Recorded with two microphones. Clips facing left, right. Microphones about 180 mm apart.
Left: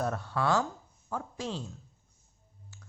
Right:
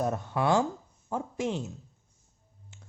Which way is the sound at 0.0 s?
20° right (ahead or behind).